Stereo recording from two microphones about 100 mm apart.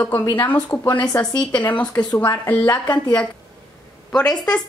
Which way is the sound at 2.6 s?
40° left (ahead or behind).